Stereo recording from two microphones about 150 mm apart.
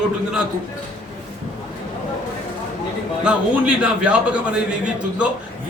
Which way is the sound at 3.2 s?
5° right (ahead or behind).